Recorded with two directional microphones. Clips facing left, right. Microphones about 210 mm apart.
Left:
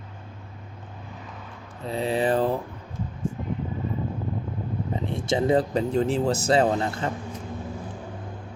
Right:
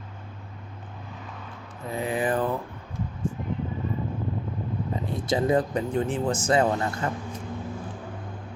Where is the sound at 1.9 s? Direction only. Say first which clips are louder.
Left 3 dB; 30° left (ahead or behind).